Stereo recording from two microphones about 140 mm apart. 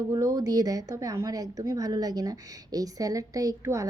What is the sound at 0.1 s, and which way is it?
A woman's voice, 25° right (ahead or behind).